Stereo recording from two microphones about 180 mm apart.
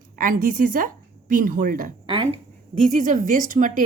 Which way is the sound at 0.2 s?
50° right (ahead or behind).